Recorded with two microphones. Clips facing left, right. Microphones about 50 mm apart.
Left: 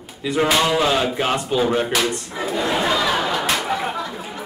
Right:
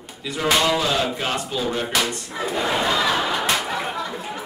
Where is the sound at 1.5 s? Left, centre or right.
Left.